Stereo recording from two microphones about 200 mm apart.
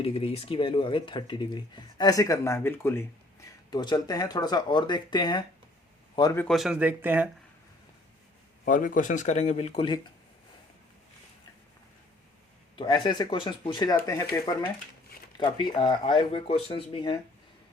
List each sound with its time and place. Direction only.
0.0 s speech: 30° left (ahead or behind)
6.4 s speech: centre (ahead or behind)
8.6 s speech: 45° left (ahead or behind); by 10.1 s 25° left (ahead or behind)
12.7 s speech: 25° left (ahead or behind)